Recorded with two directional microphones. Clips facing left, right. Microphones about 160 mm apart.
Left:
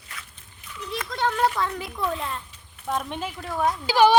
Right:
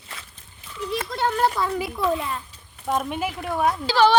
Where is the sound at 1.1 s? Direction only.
Centre (ahead or behind).